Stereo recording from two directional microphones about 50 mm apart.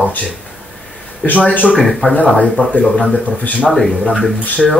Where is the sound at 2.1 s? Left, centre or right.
Left.